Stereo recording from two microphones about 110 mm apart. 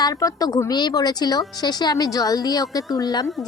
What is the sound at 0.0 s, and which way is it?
Speech, 30° left (ahead or behind).